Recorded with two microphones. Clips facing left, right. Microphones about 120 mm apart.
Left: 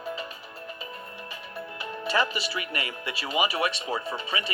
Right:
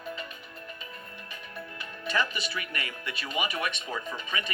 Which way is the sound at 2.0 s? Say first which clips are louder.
Left 3 dB; 30° left (ahead or behind).